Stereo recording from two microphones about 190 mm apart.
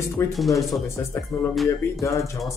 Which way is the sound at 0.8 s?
15° left (ahead or behind).